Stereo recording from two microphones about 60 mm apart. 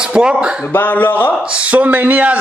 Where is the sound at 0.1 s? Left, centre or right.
Centre.